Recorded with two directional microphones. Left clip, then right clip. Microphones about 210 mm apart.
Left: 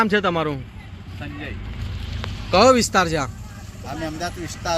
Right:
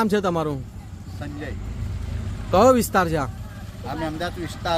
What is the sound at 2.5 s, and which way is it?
Speech, centre (ahead or behind).